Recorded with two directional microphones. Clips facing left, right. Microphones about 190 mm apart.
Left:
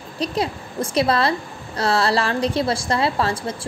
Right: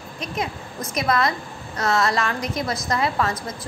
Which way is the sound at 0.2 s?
35° left (ahead or behind).